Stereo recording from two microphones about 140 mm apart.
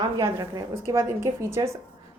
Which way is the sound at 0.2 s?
20° right (ahead or behind).